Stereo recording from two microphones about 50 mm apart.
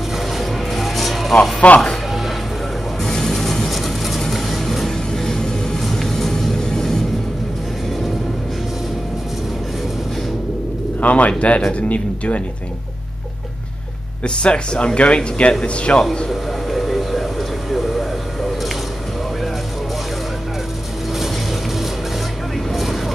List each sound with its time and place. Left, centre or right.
0.4 s music: centre
4.3 s vehicle: centre
11.0 s speech: left
14.2 s speech: centre
16.3 s a sound: centre
22.7 s vehicle: centre